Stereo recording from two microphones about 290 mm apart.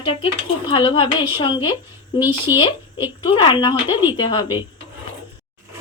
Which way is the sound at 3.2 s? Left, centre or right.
Centre.